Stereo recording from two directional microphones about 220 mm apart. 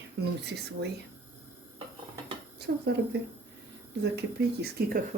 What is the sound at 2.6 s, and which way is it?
Speech, 50° right (ahead or behind).